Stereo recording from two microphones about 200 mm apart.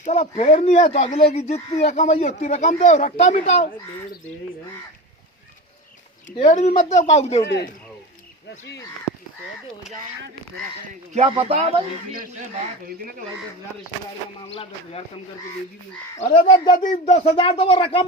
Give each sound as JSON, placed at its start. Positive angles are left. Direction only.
{"t": 0.0, "sound": "speech", "side_deg": 35}
{"t": 6.3, "sound": "speech", "side_deg": 30}
{"t": 7.4, "sound": "speech", "side_deg": 60}
{"t": 11.1, "sound": "speech", "side_deg": -30}
{"t": 14.5, "sound": "speech", "side_deg": 30}
{"t": 16.1, "sound": "speech", "side_deg": 30}